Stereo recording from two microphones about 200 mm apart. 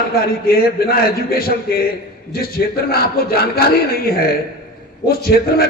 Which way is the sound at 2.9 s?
50° left (ahead or behind).